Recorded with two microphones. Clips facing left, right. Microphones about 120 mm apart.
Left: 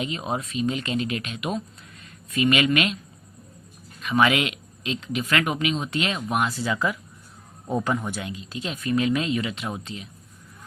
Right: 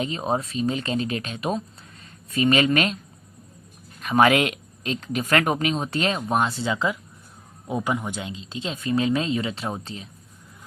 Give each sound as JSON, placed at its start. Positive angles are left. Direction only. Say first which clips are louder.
{"t": 0.0, "sound": "speech", "louder": "right 3 dB", "side_deg": -35}
{"t": 4.0, "sound": "speech", "louder": "right 3 dB", "side_deg": -45}
{"t": 7.7, "sound": "speech", "louder": "left 1 dB", "side_deg": -15}